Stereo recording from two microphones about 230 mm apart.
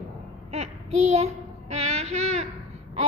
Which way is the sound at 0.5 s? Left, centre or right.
Right.